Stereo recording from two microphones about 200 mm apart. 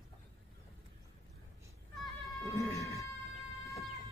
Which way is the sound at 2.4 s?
15° right (ahead or behind).